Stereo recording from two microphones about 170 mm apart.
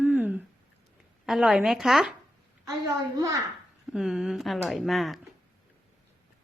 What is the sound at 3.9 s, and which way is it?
Speech, 5° right (ahead or behind).